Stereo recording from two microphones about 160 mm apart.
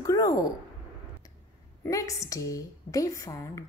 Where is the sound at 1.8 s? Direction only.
20° left (ahead or behind).